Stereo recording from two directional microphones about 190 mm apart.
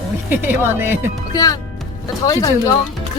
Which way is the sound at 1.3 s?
20° left (ahead or behind).